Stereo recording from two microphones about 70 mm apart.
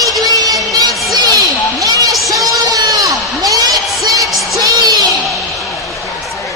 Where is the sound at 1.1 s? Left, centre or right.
Right.